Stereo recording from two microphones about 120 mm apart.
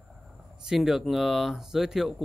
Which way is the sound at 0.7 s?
Centre (ahead or behind).